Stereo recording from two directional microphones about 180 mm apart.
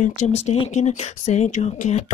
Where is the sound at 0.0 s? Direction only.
40° left (ahead or behind).